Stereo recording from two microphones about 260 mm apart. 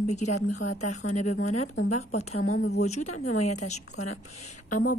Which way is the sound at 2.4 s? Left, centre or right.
Left.